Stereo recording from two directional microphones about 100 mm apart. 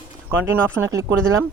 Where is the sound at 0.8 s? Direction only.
35° right (ahead or behind).